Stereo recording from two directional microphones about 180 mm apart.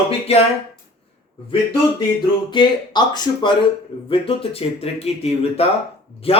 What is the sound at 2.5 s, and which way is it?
Speech, 25° left (ahead or behind).